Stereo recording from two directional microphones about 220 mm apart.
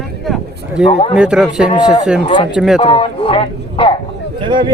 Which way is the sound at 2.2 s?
20° left (ahead or behind).